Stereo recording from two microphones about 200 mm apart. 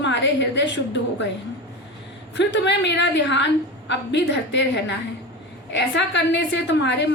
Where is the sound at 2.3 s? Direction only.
60° left (ahead or behind).